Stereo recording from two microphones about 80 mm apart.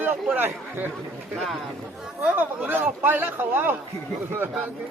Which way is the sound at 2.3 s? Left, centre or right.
Right.